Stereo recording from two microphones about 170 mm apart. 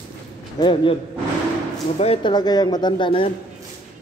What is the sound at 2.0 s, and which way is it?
Speech, 30° left (ahead or behind).